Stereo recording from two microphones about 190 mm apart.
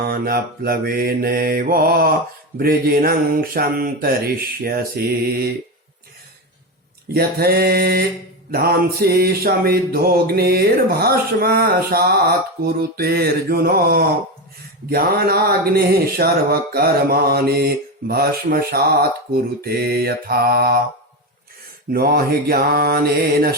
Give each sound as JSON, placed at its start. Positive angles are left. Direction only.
{"t": 0.0, "sound": "mantra", "side_deg": -55}
{"t": 7.1, "sound": "mantra", "side_deg": -55}
{"t": 21.9, "sound": "mantra", "side_deg": -55}